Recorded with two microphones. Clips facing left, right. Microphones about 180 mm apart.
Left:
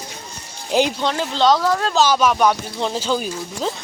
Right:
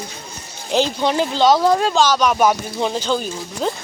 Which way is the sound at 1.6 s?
20° right (ahead or behind).